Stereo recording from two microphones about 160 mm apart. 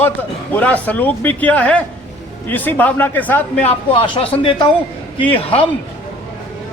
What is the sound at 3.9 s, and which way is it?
Speech, 30° left (ahead or behind).